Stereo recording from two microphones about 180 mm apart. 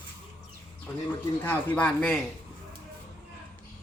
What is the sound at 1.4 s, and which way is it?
Speech, 5° left (ahead or behind).